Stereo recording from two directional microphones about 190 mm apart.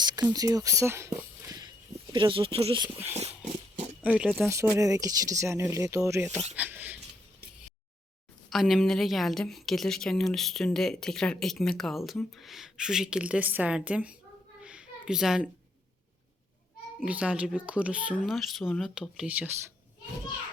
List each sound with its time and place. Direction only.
0.0 s speech: 20° right (ahead or behind)
4.0 s a woman's voice: 5° right (ahead or behind)
4.4 s speech: 15° right (ahead or behind)
8.4 s a woman's voice: centre (ahead or behind)
14.6 s a sound: 5° right (ahead or behind)
17.1 s a woman's voice: 5° right (ahead or behind)